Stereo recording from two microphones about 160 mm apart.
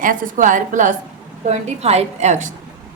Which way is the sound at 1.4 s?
40° right (ahead or behind).